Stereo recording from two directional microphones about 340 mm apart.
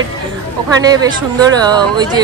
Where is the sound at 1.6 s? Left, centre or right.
Centre.